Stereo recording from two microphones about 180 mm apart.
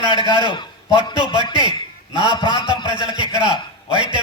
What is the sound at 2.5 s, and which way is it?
A man's voice, 25° right (ahead or behind).